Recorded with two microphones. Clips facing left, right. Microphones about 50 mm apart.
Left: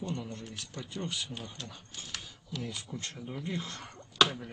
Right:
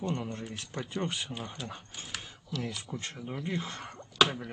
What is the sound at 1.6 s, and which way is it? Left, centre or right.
Speech, centre.